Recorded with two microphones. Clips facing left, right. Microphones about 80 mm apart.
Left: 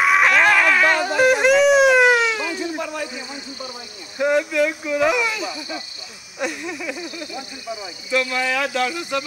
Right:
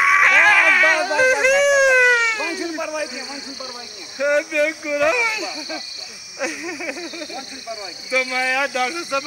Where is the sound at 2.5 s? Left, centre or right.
Centre.